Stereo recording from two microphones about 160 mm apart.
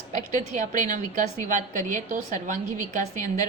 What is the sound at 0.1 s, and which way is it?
A woman's voice, 50° right (ahead or behind).